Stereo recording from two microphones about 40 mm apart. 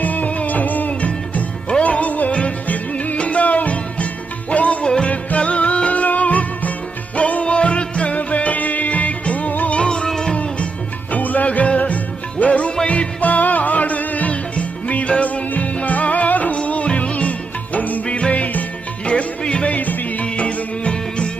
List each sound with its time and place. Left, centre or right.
0.0 s music: left
9.7 s music: left
11.1 s music: left
18.0 s music: left
19.0 s music: left
19.7 s music: left
20.2 s music: left